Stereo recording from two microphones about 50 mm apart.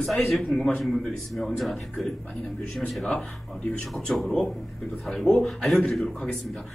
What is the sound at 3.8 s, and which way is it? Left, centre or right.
Drum kit, centre.